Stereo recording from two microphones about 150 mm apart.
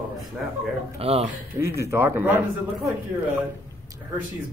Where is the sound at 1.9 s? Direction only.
15° right (ahead or behind).